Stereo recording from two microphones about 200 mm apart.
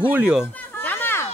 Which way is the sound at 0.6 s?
10° left (ahead or behind).